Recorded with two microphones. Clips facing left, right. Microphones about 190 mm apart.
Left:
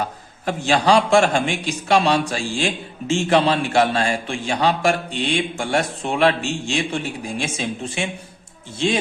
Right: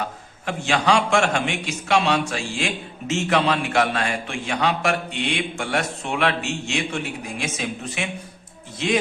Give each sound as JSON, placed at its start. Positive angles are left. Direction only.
{"t": 0.4, "sound": "a man's voice", "side_deg": 35}